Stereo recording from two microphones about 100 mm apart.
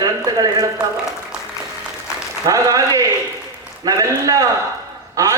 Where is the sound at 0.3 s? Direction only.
40° right (ahead or behind).